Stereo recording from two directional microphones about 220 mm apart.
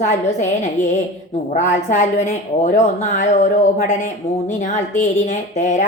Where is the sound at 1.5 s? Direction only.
35° left (ahead or behind).